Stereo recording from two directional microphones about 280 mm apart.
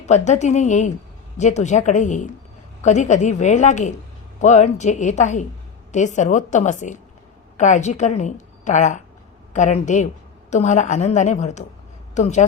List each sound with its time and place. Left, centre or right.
0.0 s a woman's voice: left